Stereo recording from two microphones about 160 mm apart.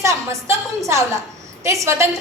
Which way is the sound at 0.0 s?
20° right (ahead or behind).